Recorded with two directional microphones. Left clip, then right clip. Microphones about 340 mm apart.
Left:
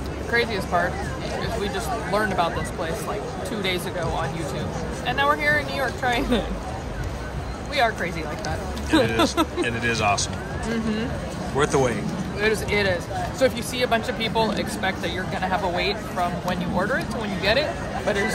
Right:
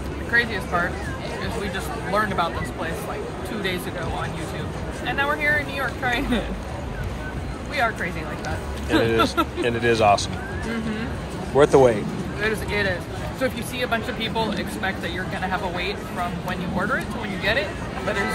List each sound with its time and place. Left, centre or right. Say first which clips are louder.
0.3 s speech: right 1 dB; centre
2.1 s speech: right 1 dB; centre
5.0 s speech: left 1 dB; centre
7.7 s speech: left 1 dB; centre
8.9 s speech: even; centre
11.5 s speech: right 6 dB; centre
12.4 s speech: left 2 dB; centre